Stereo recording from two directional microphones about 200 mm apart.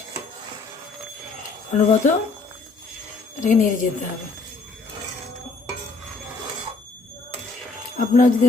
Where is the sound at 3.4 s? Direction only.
40° left (ahead or behind).